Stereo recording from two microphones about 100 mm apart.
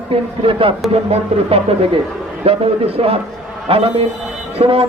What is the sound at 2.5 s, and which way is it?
Speech, 80° right.